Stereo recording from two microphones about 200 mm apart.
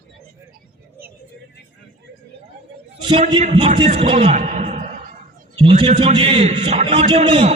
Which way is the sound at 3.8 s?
30° right (ahead or behind).